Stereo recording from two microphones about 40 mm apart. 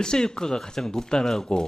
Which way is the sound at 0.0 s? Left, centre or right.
Centre.